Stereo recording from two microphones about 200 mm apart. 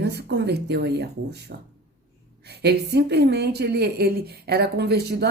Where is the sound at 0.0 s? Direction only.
55° right (ahead or behind).